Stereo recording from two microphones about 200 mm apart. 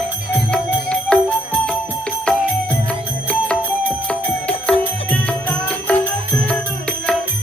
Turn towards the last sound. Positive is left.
turn(degrees=5)  # may be behind; listen again after turning